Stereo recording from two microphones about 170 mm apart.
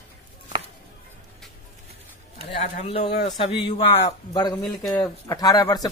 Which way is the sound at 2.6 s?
40° left (ahead or behind).